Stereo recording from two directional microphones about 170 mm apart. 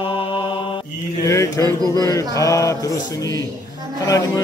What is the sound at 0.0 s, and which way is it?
Mantra, 30° left (ahead or behind).